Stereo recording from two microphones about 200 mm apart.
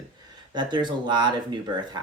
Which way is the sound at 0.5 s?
20° right (ahead or behind).